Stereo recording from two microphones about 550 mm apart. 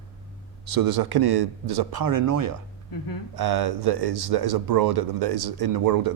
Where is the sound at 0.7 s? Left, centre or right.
Right.